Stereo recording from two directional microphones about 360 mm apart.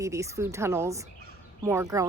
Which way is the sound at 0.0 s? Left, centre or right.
Centre.